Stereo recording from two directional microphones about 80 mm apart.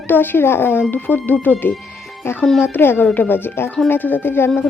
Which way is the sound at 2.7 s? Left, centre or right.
Left.